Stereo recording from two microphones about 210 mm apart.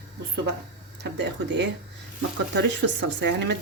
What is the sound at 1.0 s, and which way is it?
Speech, 55° right (ahead or behind).